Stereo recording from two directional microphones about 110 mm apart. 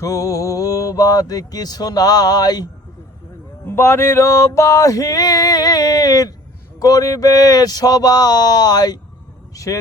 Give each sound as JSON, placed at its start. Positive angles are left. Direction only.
{"t": 0.0, "sound": "speech", "side_deg": 30}
{"t": 3.7, "sound": "speech", "side_deg": 25}